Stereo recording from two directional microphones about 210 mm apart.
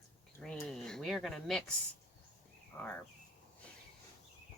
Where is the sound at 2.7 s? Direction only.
5° left (ahead or behind).